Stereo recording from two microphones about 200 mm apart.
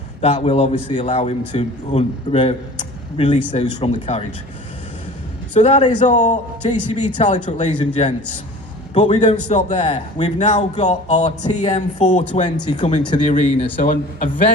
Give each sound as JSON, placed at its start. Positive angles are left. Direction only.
{"t": 0.2, "sound": "a man's voice", "side_deg": 30}
{"t": 5.5, "sound": "a man's voice", "side_deg": 30}
{"t": 12.3, "sound": "speech", "side_deg": 20}
{"t": 13.2, "sound": "a man's voice", "side_deg": 40}